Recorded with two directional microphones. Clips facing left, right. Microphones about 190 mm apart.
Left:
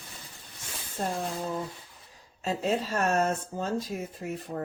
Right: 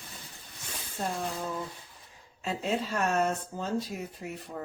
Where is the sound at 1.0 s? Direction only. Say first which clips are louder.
Left 2 dB; 35° left (ahead or behind).